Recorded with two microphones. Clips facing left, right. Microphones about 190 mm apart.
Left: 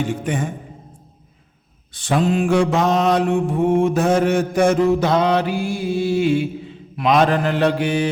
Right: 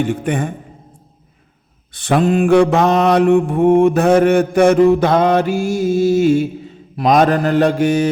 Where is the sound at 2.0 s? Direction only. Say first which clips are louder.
Right 4 dB; 60° right (ahead or behind).